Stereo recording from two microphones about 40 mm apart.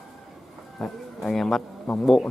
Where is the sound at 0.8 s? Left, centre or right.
Centre.